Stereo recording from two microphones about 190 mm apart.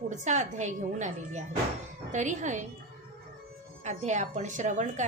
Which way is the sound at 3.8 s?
40° right (ahead or behind).